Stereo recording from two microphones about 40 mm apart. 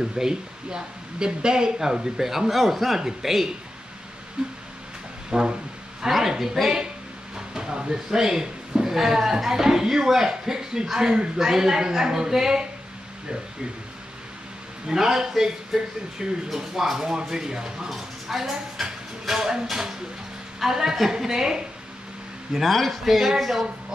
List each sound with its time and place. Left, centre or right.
0.0 s speech: centre
5.3 s a sound: centre
6.0 s speech: centre
14.9 s speech: centre
22.7 s speech: centre
23.0 s speech: centre